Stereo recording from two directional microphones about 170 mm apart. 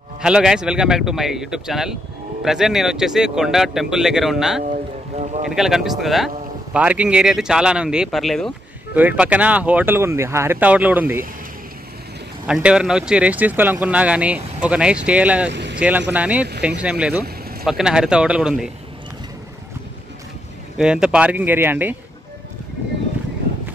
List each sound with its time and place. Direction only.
0.2 s speech: 5° right (ahead or behind)
4.6 s boat: 40° right (ahead or behind)
5.4 s speech: 5° right (ahead or behind)
12.4 s speech: 5° right (ahead or behind)
20.7 s speech: 5° right (ahead or behind)